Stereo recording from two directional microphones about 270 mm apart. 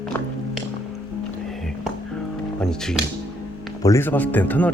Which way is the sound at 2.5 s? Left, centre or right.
Centre.